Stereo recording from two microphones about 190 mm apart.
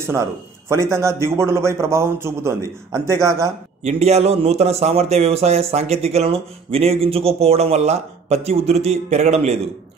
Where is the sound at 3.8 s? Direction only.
35° right (ahead or behind).